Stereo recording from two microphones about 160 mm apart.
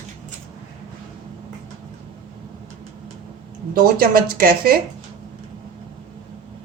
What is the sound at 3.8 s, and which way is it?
Speech, 70° right (ahead or behind).